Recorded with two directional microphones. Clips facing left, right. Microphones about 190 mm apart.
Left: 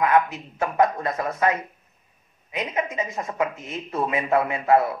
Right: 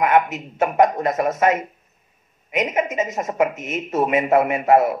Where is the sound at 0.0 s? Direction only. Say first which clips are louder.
Right 3 dB; 20° right (ahead or behind).